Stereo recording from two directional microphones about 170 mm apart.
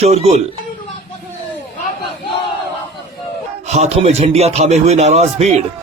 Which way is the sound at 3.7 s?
40° right (ahead or behind).